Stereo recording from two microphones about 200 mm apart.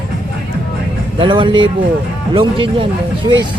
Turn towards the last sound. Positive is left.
turn(degrees=-25)  # may be behind; listen again after turning